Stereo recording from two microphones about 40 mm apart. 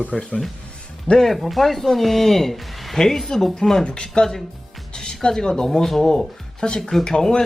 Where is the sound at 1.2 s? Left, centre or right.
Centre.